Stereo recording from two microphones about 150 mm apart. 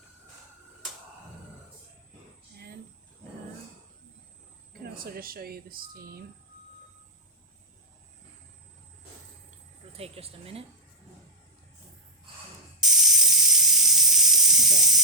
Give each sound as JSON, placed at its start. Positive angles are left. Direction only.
{"t": 4.9, "sound": "speech", "side_deg": -80}
{"t": 10.0, "sound": "speech", "side_deg": -40}
{"t": 12.8, "sound": "steam", "side_deg": 0}